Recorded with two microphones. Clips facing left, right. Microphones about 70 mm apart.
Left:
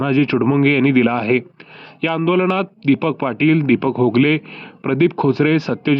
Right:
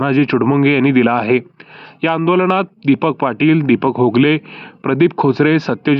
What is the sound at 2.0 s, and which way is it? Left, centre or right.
Speech, right.